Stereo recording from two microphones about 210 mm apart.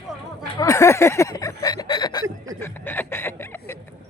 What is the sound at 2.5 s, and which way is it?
Snicker, 10° left (ahead or behind).